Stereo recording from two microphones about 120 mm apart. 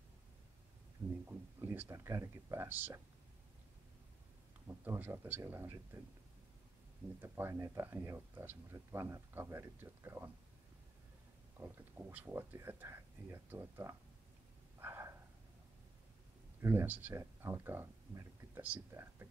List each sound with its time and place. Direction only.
1.2 s speech: 20° right (ahead or behind)
4.8 s speech: 15° right (ahead or behind)
7.2 s speech: 20° right (ahead or behind)
11.6 s speech: 15° right (ahead or behind)
14.8 s a sound: 20° right (ahead or behind)
16.6 s speech: 15° right (ahead or behind)